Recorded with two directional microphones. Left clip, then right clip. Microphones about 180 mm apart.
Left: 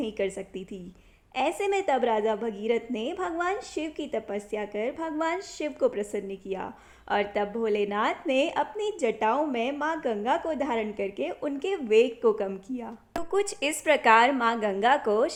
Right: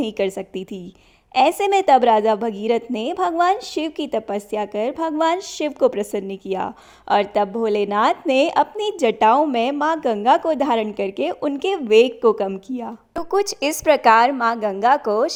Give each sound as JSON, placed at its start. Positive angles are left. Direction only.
{"t": 0.0, "sound": "a woman's voice", "side_deg": -45}